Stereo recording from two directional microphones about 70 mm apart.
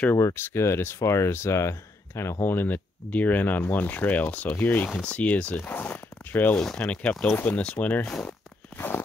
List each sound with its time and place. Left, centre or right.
0.2 s speech: left
2.4 s speech: left
6.5 s speech: centre
8.1 s speech: centre
8.7 s a sound: left